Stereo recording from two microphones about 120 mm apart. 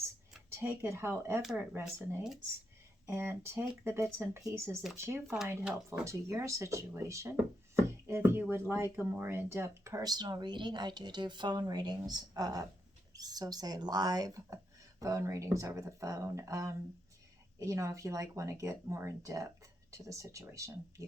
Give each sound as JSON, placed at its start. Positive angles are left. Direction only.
{"t": 0.5, "sound": "speech", "side_deg": -20}
{"t": 1.4, "sound": "speech", "side_deg": 0}
{"t": 3.1, "sound": "speech", "side_deg": -20}
{"t": 5.6, "sound": "speech", "side_deg": -10}
{"t": 6.1, "sound": "speech", "side_deg": -25}